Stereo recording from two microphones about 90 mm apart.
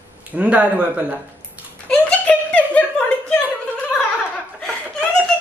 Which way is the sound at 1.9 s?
10° left (ahead or behind).